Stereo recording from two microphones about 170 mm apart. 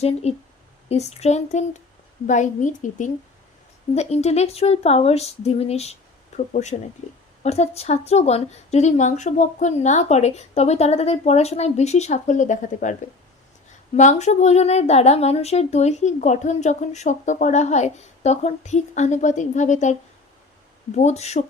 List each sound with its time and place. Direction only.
0.0 s a woman's voice: 40° left (ahead or behind)